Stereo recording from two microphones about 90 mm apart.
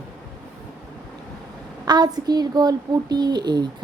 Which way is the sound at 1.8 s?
50° right (ahead or behind).